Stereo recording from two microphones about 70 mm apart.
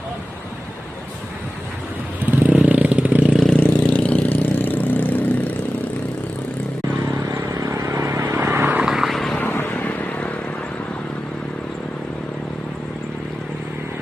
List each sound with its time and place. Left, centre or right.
2.2 s vehicle: right
3.5 s vehicle: centre
7.1 s vehicle: right
8.8 s vehicle: centre
9.1 s vehicle: centre
9.4 s vehicle: left